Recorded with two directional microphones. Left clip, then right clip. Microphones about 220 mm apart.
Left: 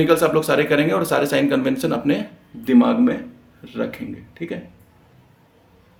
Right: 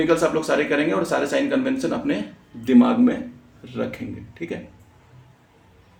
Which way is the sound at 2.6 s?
10° left (ahead or behind).